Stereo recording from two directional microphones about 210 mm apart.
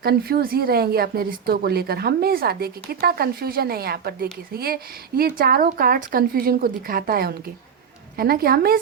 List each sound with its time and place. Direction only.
0.0 s speech: 50° right (ahead or behind)